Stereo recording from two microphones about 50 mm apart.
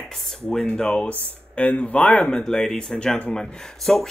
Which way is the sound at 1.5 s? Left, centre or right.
Left.